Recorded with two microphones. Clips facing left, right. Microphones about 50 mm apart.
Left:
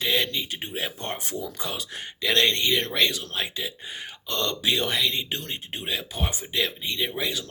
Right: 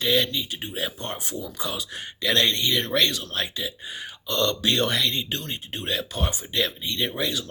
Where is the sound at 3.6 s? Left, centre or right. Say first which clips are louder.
Right 1 dB; left; by 5.3 s centre.